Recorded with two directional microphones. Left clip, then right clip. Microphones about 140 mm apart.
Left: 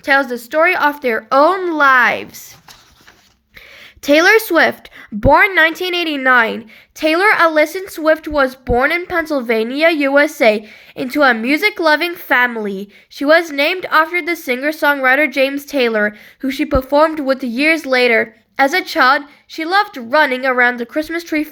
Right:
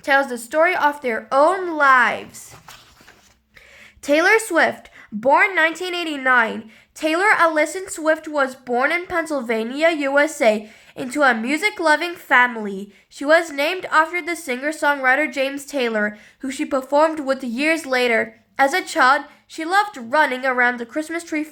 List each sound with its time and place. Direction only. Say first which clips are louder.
0.0 s a woman's voice: left 4 dB; 10° left (ahead or behind); by 2.2 s 30° left (ahead or behind)
4.0 s a woman's voice: left 5 dB; 25° left (ahead or behind)